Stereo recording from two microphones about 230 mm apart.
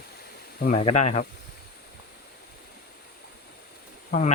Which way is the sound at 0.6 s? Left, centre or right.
Left.